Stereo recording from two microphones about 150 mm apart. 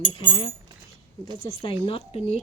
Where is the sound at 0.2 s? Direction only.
30° left (ahead or behind).